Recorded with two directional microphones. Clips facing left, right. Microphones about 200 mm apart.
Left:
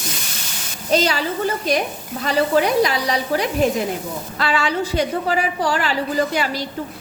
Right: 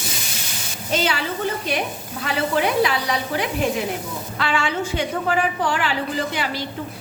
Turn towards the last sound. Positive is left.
turn(degrees=40)  # may be behind; listen again after turning